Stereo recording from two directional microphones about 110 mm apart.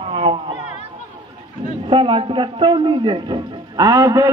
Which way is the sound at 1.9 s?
50° right (ahead or behind).